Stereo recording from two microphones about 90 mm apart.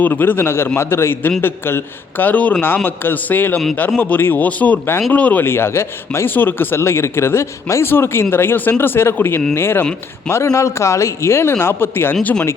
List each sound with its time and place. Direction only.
0.0 s speech: 20° left (ahead or behind)